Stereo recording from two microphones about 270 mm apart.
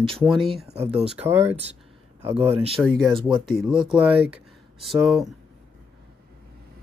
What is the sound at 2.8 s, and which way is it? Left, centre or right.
Speech, centre.